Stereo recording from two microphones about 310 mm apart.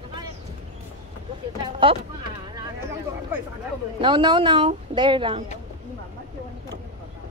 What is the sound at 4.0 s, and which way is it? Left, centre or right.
Speech, centre.